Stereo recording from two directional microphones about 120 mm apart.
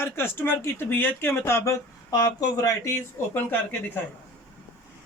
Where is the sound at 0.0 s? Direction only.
20° left (ahead or behind).